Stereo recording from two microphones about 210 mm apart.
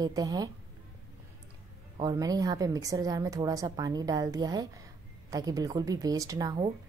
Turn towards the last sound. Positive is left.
turn(degrees=-20)  # may be behind; listen again after turning